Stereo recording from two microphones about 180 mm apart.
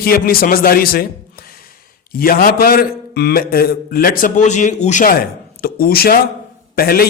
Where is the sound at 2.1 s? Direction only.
55° left (ahead or behind).